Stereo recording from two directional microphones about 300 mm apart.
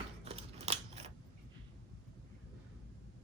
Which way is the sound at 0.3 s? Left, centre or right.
Right.